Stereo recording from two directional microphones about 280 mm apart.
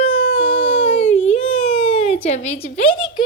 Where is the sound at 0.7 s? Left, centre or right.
Left.